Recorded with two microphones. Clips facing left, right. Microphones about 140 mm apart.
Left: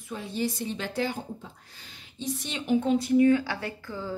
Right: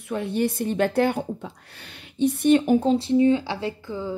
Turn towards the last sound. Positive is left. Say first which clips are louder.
# right 6 dB
turn(degrees=-20)  # may be behind; listen again after turning